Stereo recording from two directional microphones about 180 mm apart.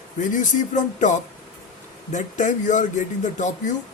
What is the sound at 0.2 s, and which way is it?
A man's voice, 45° left (ahead or behind).